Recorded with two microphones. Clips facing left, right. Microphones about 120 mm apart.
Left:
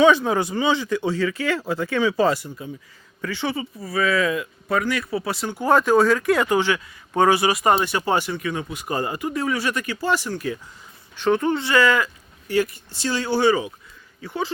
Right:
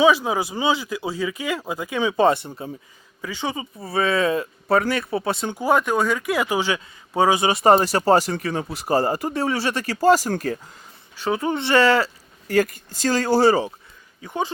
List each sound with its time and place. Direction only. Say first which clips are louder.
0.0 s speech: left 1 dB; 5° right (ahead or behind); by 2.6 s 25° right (ahead or behind)
3.2 s speech: left 2 dB; 15° right (ahead or behind)
5.6 s speech: left 3 dB; centre (ahead or behind)
7.4 s speech: right 3 dB; 30° right (ahead or behind); by 10.6 s 45° right (ahead or behind)
11.2 s speech: left 3 dB; 10° right (ahead or behind)
11.5 s speech: right 2 dB; 25° right (ahead or behind)
12.5 s speech: right 2 dB; 45° right (ahead or behind)
14.2 s speech: right 1 dB; 20° right (ahead or behind)